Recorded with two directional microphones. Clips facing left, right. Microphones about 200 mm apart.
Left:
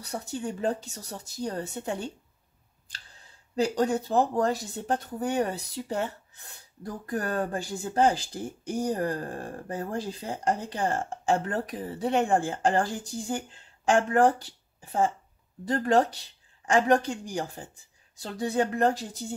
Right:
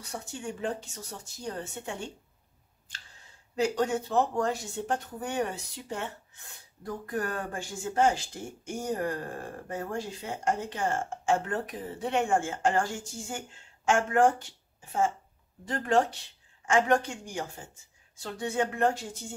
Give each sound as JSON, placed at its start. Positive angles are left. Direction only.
{"t": 0.0, "sound": "speech", "side_deg": 35}
{"t": 3.5, "sound": "speech", "side_deg": 35}